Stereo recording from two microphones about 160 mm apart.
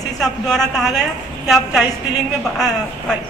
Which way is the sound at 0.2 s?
Centre (ahead or behind).